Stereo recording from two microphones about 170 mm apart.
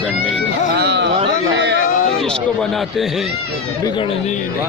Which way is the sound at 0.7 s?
85° right.